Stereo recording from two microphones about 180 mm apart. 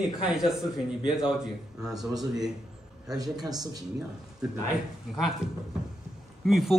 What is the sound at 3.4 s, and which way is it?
Speech, 20° right (ahead or behind).